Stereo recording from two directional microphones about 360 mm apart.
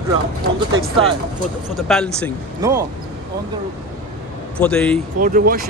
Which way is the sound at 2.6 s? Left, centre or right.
Centre.